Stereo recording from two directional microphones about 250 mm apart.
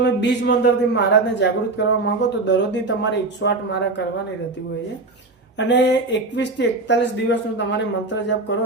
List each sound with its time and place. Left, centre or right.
0.0 s a man's voice: left
5.5 s a man's voice: left